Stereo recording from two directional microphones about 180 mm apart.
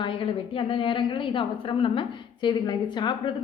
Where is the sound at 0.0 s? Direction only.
30° left (ahead or behind).